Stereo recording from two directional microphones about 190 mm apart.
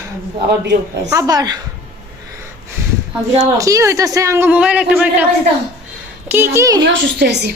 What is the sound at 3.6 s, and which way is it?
A man's voice, 15° right (ahead or behind).